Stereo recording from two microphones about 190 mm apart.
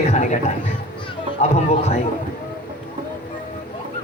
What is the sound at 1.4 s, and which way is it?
Speech, 35° left (ahead or behind).